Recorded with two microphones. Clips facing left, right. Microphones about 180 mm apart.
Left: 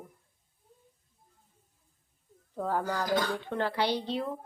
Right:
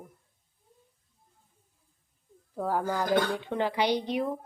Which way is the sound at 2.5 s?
5° right (ahead or behind).